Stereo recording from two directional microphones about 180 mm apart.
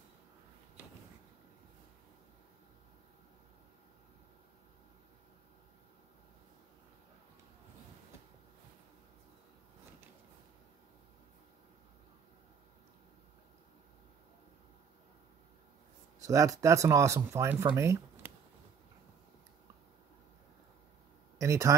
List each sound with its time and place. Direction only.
16.2 s speech: 20° right (ahead or behind)
21.4 s speech: 15° right (ahead or behind)